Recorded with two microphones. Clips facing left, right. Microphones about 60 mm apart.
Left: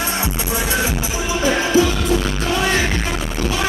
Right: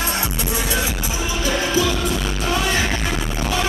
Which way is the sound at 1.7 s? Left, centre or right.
Left.